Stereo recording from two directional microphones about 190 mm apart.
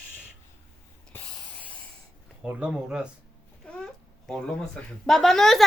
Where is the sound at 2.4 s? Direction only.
5° right (ahead or behind).